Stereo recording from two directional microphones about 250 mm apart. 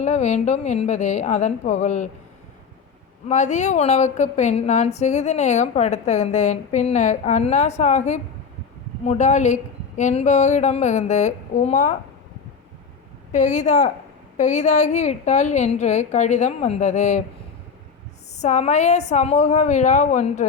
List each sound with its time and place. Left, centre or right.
0.0 s a woman's voice: left
3.2 s a woman's voice: left
13.3 s a woman's voice: left
18.3 s a woman's voice: left